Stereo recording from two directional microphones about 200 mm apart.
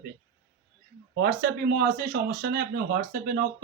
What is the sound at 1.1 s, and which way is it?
Speech, 55° right (ahead or behind).